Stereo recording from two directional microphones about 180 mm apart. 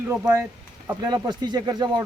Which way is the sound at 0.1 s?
15° right (ahead or behind).